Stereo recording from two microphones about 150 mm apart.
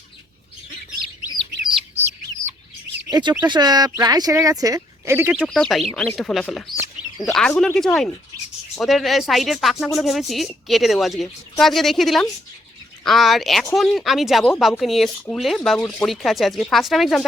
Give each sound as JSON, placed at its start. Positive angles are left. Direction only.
{"t": 3.1, "sound": "speech", "side_deg": -30}
{"t": 5.3, "sound": "speech", "side_deg": 0}